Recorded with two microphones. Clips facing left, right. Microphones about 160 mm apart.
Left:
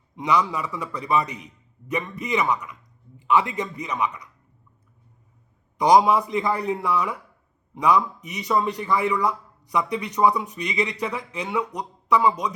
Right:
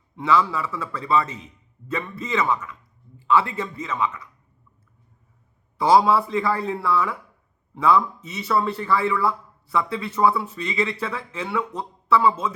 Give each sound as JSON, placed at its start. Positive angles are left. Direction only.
{"t": 0.2, "sound": "a man's voice", "side_deg": 15}
{"t": 5.7, "sound": "a man's voice", "side_deg": 15}